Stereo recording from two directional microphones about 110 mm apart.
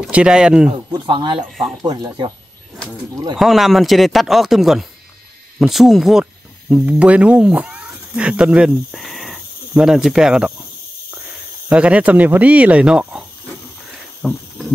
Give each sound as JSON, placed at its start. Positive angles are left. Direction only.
{"t": 0.1, "sound": "speech", "side_deg": -10}
{"t": 0.9, "sound": "speech", "side_deg": -45}
{"t": 1.5, "sound": "chopping", "side_deg": 0}
{"t": 1.8, "sound": "speech", "side_deg": -40}
{"t": 3.3, "sound": "chopping", "side_deg": 0}
{"t": 6.7, "sound": "speech", "side_deg": -10}
{"t": 11.7, "sound": "speech", "side_deg": -10}
{"t": 14.2, "sound": "chopping", "side_deg": 0}